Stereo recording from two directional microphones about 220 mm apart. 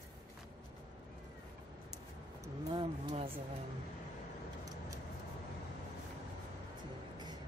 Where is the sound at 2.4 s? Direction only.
25° right (ahead or behind).